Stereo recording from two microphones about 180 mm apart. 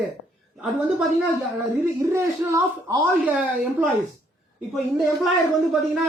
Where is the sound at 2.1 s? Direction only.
15° right (ahead or behind).